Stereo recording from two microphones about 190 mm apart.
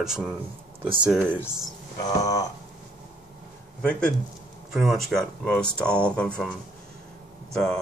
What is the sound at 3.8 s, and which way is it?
A man's voice, 5° left (ahead or behind).